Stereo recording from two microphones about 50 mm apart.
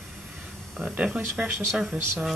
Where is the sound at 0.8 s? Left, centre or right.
Right.